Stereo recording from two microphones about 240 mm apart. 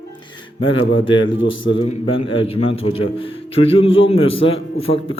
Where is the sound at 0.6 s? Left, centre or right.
Left.